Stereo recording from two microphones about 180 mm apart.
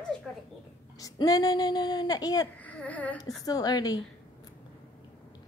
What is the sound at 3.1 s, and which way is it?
Speech, 20° left (ahead or behind).